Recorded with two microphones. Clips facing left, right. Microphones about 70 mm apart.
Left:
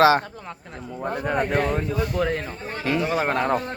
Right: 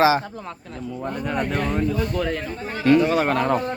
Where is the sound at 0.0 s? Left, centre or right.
Left.